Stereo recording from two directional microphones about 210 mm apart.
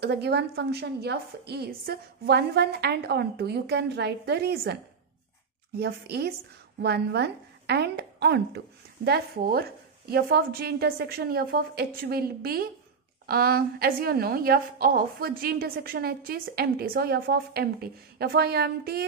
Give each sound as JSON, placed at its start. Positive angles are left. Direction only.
{"t": 0.0, "sound": "a woman's voice", "side_deg": -50}
{"t": 5.8, "sound": "a woman's voice", "side_deg": -50}